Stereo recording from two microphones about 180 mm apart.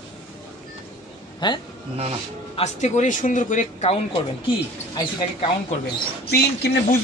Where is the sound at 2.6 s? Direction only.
40° left (ahead or behind).